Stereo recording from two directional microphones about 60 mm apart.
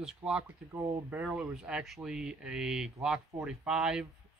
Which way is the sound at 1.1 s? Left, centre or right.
Right.